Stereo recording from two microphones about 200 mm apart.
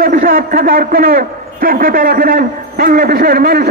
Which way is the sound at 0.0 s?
45° right (ahead or behind).